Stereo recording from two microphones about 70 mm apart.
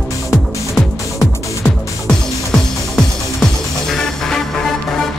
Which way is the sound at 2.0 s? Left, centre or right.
Centre.